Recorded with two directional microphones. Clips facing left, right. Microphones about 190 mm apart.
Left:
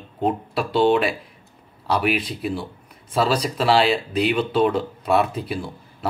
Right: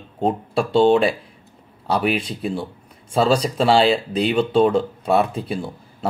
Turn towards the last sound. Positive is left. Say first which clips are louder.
# right 1 dB
turn(degrees=-30)  # may be behind; listen again after turning